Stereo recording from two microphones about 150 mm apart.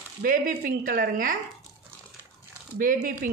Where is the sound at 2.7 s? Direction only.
70° right (ahead or behind).